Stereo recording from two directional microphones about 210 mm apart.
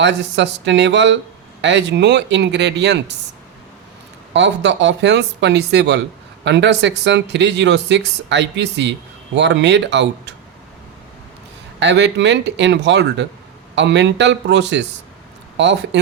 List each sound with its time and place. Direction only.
0.0 s speech: 55° right (ahead or behind)
4.4 s speech: 60° right (ahead or behind)
11.8 s speech: 55° right (ahead or behind)